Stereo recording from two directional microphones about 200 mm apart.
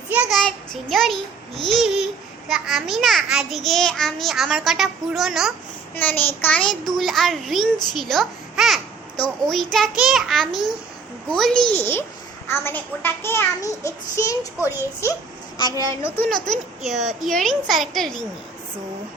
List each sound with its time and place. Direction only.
0.1 s a child's voice: 5° right (ahead or behind)
5.9 s a child's voice: 10° left (ahead or behind)
16.1 s a child's voice: 5° left (ahead or behind)